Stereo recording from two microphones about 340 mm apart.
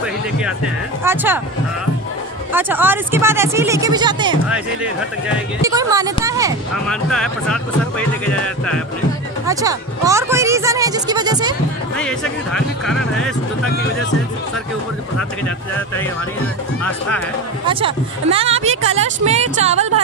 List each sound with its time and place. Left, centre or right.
0.0 s music: centre
1.0 s speech: centre
2.5 s speech: centre
6.9 s speech: centre
9.5 s speech: centre
12.0 s speech: centre
15.1 s speech: centre
17.6 s a woman's voice: centre